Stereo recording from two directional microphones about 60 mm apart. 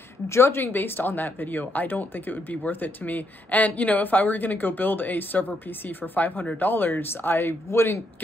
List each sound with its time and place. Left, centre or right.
0.3 s speech: left